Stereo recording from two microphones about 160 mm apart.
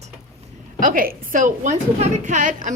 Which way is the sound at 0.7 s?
60° right (ahead or behind).